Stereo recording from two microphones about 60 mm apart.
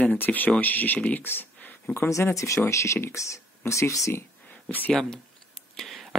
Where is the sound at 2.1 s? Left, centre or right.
Left.